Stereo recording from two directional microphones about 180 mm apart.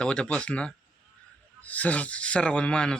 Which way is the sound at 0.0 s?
5° left (ahead or behind).